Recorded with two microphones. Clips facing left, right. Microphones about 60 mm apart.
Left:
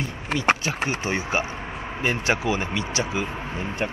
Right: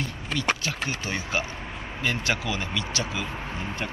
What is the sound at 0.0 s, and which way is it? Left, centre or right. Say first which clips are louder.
Speech: left 4 dB; left.